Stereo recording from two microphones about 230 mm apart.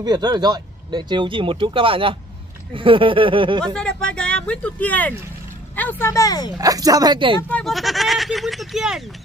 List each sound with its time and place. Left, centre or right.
0.0 s speech: centre
3.6 s speech: centre
6.6 s speech: centre
7.4 s speech: centre